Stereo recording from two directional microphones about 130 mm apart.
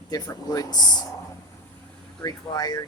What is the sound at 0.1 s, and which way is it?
Speech, 30° left (ahead or behind).